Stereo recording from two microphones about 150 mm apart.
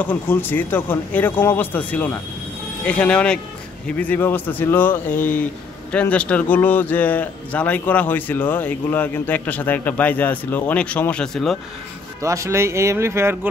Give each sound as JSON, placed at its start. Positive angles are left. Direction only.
{"t": 0.0, "sound": "a man's voice", "side_deg": 10}
{"t": 12.2, "sound": "speech", "side_deg": -20}